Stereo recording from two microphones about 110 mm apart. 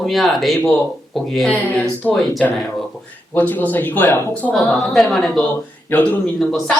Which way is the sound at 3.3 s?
15° left (ahead or behind).